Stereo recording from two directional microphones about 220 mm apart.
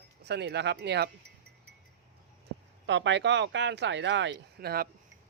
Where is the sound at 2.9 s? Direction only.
55° right (ahead or behind).